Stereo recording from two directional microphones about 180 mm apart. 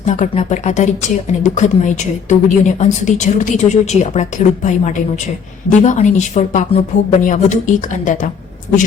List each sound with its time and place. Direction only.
0.0 s a woman's voice: 40° left (ahead or behind)